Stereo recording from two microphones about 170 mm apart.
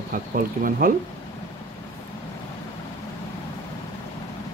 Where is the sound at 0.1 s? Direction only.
55° right (ahead or behind).